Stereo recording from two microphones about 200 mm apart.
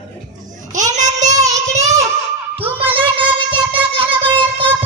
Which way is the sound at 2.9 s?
25° right (ahead or behind).